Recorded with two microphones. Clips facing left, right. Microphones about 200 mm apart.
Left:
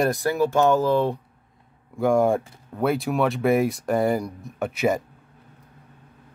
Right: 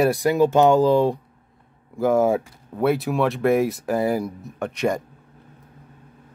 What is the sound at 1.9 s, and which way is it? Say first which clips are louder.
Speech: right 1 dB; centre (ahead or behind).